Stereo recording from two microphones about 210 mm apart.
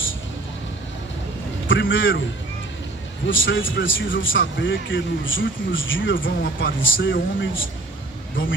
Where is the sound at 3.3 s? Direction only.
65° left (ahead or behind).